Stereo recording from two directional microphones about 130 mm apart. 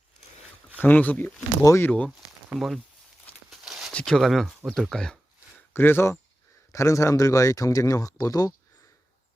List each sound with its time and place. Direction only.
0.8 s speech: 15° left (ahead or behind)
2.6 s speech: centre (ahead or behind)
3.5 s a sound: 5° right (ahead or behind)
3.9 s speech: 5° left (ahead or behind)
5.7 s speech: 15° left (ahead or behind)